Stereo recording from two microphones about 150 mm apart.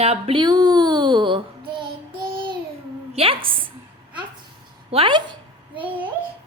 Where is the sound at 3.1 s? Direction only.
40° right (ahead or behind).